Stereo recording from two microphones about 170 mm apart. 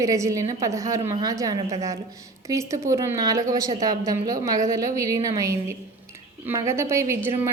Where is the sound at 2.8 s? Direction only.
15° right (ahead or behind).